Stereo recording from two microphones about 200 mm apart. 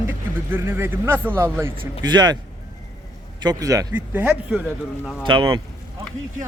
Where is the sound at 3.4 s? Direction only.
15° right (ahead or behind).